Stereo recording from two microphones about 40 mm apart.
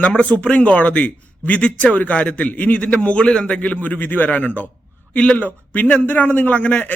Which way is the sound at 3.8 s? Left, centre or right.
Left.